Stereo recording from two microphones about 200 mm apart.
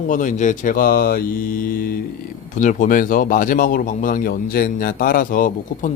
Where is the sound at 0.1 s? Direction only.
40° left (ahead or behind).